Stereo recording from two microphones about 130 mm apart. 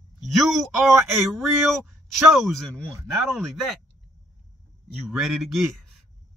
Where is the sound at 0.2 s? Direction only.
Centre (ahead or behind).